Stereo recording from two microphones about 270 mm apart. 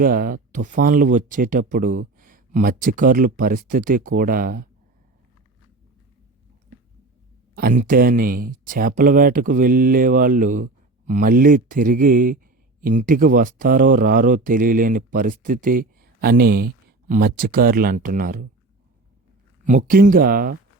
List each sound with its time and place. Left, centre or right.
0.0 s speech: right
7.5 s speech: right
19.6 s speech: right